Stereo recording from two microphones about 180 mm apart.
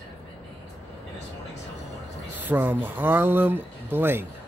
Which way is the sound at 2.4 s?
10° right (ahead or behind).